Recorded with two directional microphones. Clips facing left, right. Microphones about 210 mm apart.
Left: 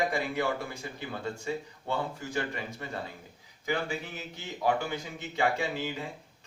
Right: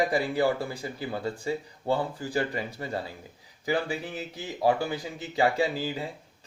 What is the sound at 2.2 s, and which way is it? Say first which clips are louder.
Speech: right 4 dB; 35° right (ahead or behind).